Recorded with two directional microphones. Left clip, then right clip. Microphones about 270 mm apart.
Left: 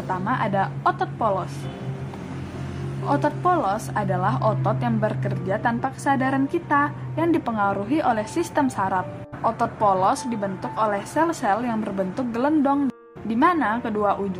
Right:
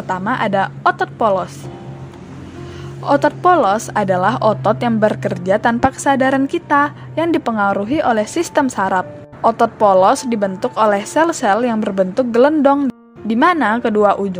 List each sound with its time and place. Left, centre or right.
0.1 s a woman's voice: right
3.1 s a woman's voice: right